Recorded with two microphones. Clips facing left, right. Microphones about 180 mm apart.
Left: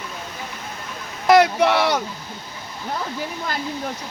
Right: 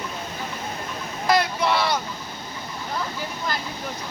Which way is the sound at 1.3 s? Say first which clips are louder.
Left 7 dB; 70° left (ahead or behind).